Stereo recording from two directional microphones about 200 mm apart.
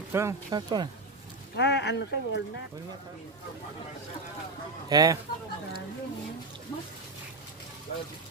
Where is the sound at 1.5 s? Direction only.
60° left (ahead or behind).